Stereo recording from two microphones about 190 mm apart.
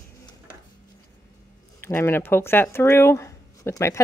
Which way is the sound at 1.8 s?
10° left (ahead or behind).